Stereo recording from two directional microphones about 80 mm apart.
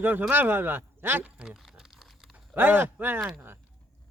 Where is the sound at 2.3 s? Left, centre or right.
Right.